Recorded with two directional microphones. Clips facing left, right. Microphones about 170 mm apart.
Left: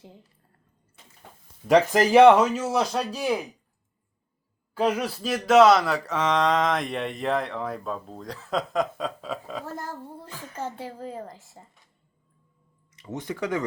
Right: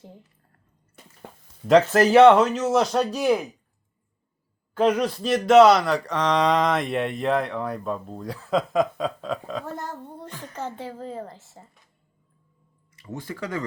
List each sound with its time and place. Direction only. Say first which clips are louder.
1.6 s speech: right 2 dB; 15° left (ahead or behind)
4.7 s speech: right 4 dB; 5° left (ahead or behind)
10.9 s a woman's voice: right 2 dB; 40° right (ahead or behind)
13.0 s speech: left 3 dB; 20° left (ahead or behind)